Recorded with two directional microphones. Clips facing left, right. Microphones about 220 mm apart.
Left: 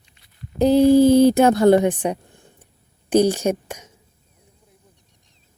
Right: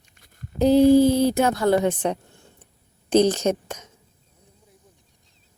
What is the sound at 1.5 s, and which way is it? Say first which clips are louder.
A woman's voice: left 5 dB; 20° left (ahead or behind).